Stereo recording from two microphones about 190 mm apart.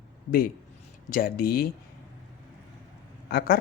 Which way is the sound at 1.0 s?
50° left (ahead or behind).